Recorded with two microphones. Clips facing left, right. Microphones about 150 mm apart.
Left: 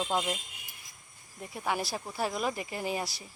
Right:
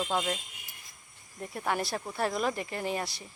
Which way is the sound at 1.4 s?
5° left (ahead or behind).